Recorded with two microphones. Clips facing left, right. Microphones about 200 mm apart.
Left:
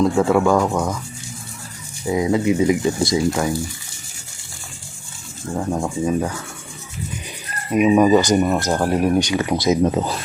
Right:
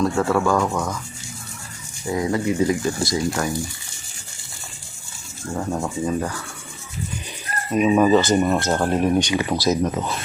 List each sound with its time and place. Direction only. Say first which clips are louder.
0.0 s speech: left 4 dB; 15° left (ahead or behind)
2.0 s speech: left 4 dB; 15° left (ahead or behind)
5.5 s speech: left 3 dB; 15° left (ahead or behind)
7.7 s speech: left 2 dB; 10° left (ahead or behind)
8.4 s speech: left 1 dB; 5° left (ahead or behind)
9.5 s speech: left 3 dB; 20° left (ahead or behind)